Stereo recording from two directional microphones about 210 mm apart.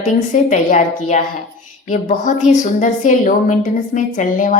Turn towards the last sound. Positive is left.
turn(degrees=35)  # may be behind; listen again after turning